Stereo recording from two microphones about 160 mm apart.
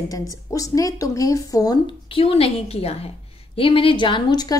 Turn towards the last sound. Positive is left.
turn(degrees=25)  # may be behind; listen again after turning